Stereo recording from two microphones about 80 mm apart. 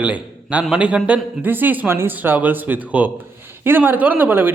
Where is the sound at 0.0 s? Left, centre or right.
Centre.